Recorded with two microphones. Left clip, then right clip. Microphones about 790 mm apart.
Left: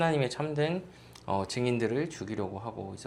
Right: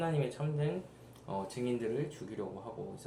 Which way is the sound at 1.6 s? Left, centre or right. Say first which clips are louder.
Left 4 dB; left.